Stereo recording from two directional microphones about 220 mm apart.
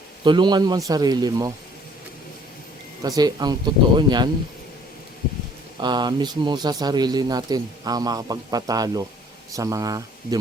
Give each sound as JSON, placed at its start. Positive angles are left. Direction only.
{"t": 0.3, "sound": "a man's voice", "side_deg": -20}
{"t": 3.0, "sound": "speech", "side_deg": -15}
{"t": 5.8, "sound": "speech", "side_deg": -20}